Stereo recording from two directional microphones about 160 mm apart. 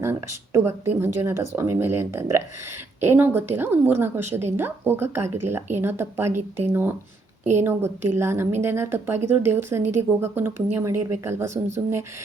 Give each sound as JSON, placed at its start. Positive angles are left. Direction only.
{"t": 0.0, "sound": "speech", "side_deg": -15}